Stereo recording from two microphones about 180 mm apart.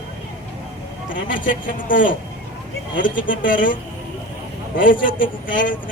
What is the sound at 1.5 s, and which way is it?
Speech, 50° left (ahead or behind).